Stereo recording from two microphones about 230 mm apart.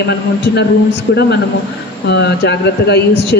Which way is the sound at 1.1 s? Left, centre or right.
Left.